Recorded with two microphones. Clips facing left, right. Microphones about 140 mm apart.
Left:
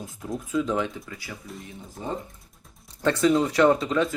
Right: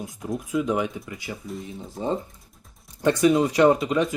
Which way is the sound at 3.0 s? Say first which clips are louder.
Right 2 dB; 15° right (ahead or behind).